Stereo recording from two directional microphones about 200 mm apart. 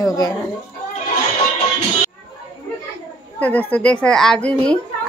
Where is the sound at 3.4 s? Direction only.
10° left (ahead or behind).